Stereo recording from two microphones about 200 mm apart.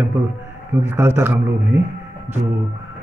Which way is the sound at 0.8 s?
10° right (ahead or behind).